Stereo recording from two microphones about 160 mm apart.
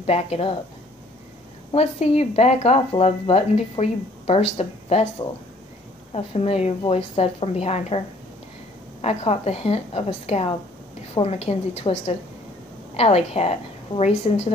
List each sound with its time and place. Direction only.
0.0 s speech: 40° left (ahead or behind)
1.7 s speech: 40° left (ahead or behind)
6.1 s speech: 40° left (ahead or behind)
9.0 s speech: 40° left (ahead or behind)